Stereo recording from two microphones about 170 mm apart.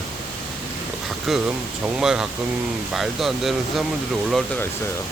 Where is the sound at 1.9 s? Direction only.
5° right (ahead or behind).